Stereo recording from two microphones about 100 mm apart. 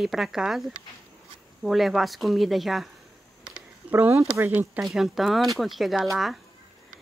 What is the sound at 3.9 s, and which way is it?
Speech, 25° right (ahead or behind).